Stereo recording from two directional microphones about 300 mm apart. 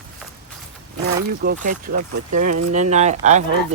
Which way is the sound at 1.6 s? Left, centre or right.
Right.